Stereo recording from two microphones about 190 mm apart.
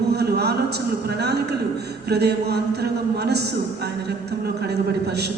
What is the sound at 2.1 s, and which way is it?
Speech, 60° right (ahead or behind).